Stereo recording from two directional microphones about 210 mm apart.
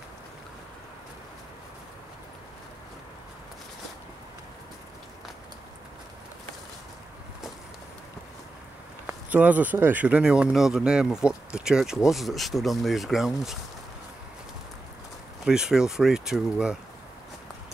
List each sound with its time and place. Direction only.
9.0 s speech: 5° right (ahead or behind)
15.4 s speech: 5° right (ahead or behind)